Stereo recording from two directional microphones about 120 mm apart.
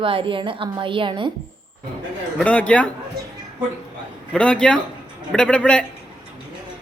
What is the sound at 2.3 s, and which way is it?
Speech, 10° left (ahead or behind).